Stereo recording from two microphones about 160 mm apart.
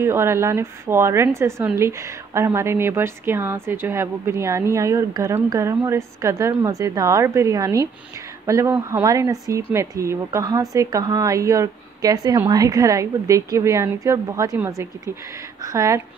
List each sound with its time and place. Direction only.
0.0 s a woman's voice: 15° right (ahead or behind)